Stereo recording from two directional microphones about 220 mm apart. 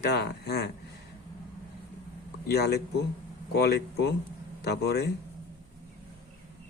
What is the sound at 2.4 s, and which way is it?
Speech, 50° left (ahead or behind).